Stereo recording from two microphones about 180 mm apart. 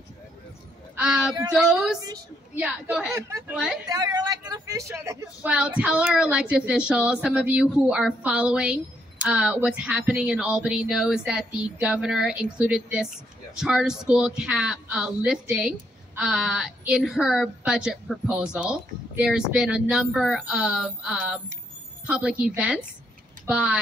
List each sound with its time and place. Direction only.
0.9 s speech: 5° right (ahead or behind)
3.1 s speech: 15° right (ahead or behind)
3.5 s speech: 5° right (ahead or behind)
3.9 s speech: 20° right (ahead or behind); by 23.8 s 5° right (ahead or behind)